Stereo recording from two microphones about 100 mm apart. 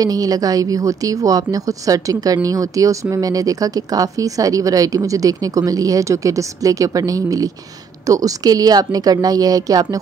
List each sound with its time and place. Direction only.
0.0 s a woman's voice: 35° right (ahead or behind)